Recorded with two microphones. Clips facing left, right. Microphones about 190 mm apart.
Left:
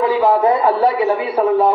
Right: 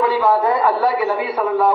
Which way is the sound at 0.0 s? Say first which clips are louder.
Left 2 dB; 20° left (ahead or behind).